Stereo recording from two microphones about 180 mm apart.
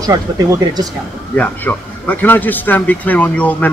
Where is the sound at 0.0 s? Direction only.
20° right (ahead or behind).